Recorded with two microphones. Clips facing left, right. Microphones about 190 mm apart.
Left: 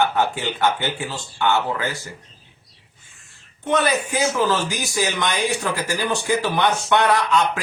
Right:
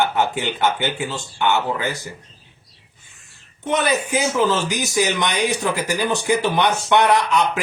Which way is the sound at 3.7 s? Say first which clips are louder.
Even; 20° right (ahead or behind).